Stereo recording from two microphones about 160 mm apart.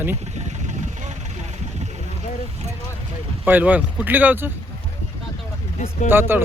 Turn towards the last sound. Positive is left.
turn(degrees=-15)  # may be behind; listen again after turning